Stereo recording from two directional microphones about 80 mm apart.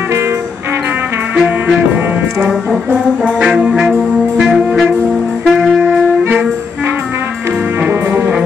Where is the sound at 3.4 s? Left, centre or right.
Centre.